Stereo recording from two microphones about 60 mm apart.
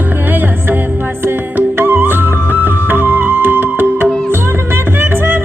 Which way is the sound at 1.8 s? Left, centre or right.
Right.